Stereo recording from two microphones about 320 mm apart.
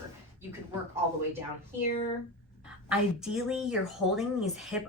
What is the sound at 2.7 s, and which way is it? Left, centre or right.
A woman's voice, centre.